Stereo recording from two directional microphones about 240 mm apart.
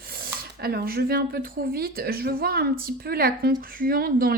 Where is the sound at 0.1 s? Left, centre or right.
Right.